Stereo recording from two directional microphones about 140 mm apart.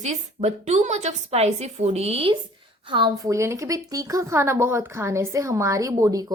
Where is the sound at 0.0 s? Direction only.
55° right (ahead or behind).